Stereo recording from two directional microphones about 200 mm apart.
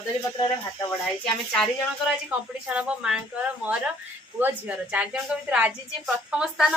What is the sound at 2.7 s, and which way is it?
A woman's voice, 5° right (ahead or behind).